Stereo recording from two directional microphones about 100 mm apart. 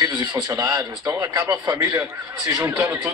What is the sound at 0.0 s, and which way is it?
A man's voice, 45° right (ahead or behind).